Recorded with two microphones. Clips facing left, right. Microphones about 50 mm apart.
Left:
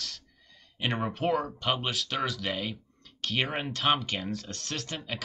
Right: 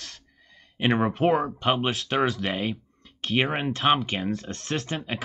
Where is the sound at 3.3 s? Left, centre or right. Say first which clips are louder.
Right 6 dB; right.